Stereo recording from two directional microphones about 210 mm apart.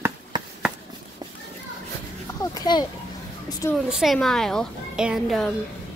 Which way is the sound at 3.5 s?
15° left (ahead or behind).